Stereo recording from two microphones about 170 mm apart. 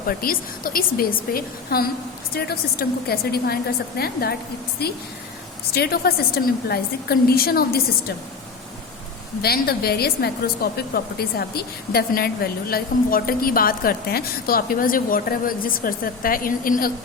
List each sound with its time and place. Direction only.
0.1 s a woman's voice: 60° left (ahead or behind)
5.7 s a woman's voice: 65° left (ahead or behind)
9.4 s a woman's voice: 65° left (ahead or behind)